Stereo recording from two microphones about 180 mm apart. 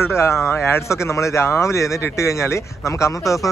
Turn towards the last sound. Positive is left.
turn(degrees=20)  # may be behind; listen again after turning